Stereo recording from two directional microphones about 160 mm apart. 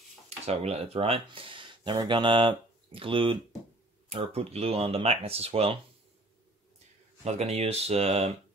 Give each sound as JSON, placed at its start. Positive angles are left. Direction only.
{"t": 0.5, "sound": "speech", "side_deg": -40}
{"t": 7.2, "sound": "speech", "side_deg": -40}